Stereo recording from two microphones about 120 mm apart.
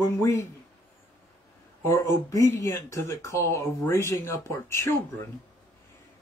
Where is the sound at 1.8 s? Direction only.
25° left (ahead or behind).